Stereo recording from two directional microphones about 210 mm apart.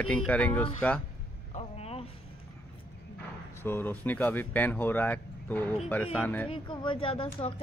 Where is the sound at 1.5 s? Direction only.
30° left (ahead or behind).